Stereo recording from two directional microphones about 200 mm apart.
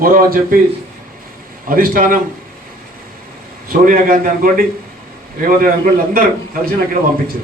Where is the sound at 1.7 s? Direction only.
45° right (ahead or behind).